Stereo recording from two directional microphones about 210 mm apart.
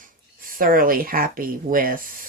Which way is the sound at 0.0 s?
40° right (ahead or behind).